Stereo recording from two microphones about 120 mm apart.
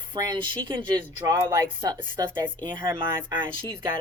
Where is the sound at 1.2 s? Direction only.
25° right (ahead or behind).